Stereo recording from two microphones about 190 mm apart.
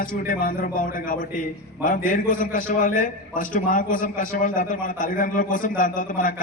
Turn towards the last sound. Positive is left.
turn(degrees=45)  # may be behind; listen again after turning